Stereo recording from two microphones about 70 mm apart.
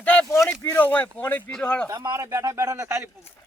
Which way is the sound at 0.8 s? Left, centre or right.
Left.